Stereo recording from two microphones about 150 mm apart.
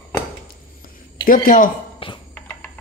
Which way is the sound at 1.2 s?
65° left (ahead or behind).